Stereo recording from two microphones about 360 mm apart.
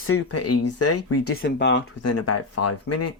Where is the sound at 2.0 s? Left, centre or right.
Left.